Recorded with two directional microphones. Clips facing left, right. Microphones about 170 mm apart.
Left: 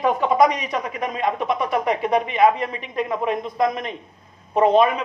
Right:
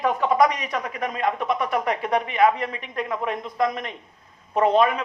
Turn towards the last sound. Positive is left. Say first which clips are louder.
# left 3 dB
turn(degrees=20)  # may be behind; listen again after turning